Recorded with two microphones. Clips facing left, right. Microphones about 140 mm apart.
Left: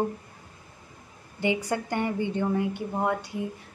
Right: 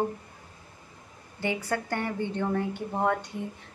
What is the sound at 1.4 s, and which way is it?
A woman's voice, 15° left (ahead or behind).